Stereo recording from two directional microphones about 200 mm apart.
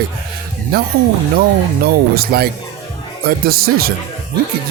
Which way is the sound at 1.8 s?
50° right (ahead or behind).